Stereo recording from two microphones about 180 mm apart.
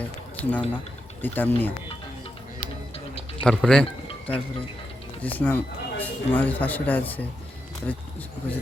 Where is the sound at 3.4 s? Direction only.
5° left (ahead or behind).